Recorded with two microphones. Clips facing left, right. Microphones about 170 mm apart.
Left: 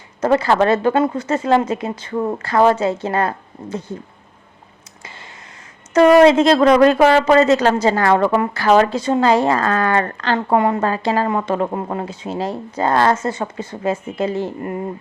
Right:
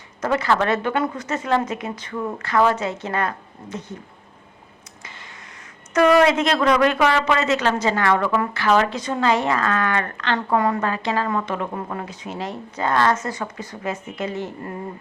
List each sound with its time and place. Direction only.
0.2 s speech: 30° left (ahead or behind)
5.9 s a woman's voice: 30° left (ahead or behind)